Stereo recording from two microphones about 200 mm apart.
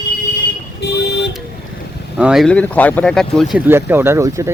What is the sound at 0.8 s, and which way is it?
Vehicle, 60° left (ahead or behind).